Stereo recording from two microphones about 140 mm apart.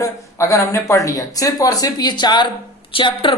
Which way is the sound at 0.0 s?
20° left (ahead or behind).